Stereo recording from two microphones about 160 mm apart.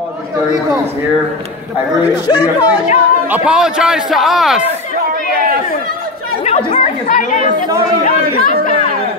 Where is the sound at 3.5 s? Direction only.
5° right (ahead or behind).